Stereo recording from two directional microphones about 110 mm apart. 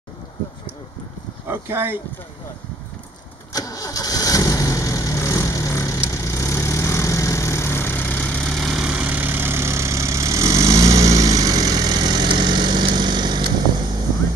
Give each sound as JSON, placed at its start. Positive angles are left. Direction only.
{"t": 1.5, "sound": "speech", "side_deg": -20}
{"t": 3.5, "sound": "vehicle", "side_deg": 35}